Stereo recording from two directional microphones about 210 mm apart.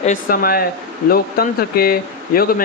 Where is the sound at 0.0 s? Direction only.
40° left (ahead or behind).